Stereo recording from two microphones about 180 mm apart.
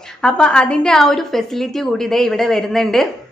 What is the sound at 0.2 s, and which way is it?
A woman's voice, 5° left (ahead or behind).